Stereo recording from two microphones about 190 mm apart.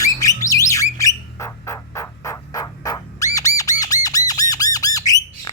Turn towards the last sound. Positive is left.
turn(degrees=20)  # may be behind; listen again after turning